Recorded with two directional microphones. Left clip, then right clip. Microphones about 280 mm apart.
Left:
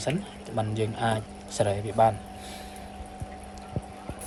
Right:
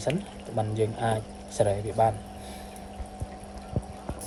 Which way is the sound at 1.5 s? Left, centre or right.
Centre.